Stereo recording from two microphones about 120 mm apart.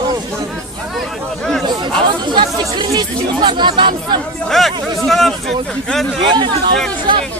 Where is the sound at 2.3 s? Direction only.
40° right (ahead or behind).